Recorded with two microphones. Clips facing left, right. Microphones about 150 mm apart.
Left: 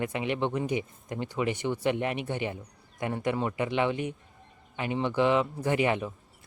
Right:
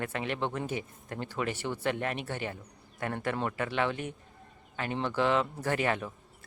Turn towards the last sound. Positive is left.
turn(degrees=15)  # may be behind; listen again after turning